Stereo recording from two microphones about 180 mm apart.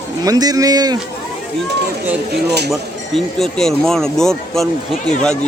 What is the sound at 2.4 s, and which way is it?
Speech, 65° right (ahead or behind).